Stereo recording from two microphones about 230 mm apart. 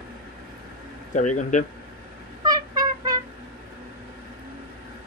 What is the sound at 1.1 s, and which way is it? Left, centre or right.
Speech, left.